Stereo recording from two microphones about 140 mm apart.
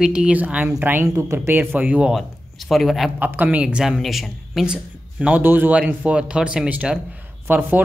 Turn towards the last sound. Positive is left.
turn(degrees=-10)  # may be behind; listen again after turning